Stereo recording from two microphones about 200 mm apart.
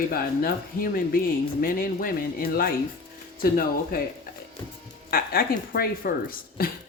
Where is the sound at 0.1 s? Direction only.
45° left (ahead or behind).